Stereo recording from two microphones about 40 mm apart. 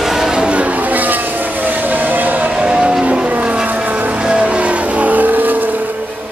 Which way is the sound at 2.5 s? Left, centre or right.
Right.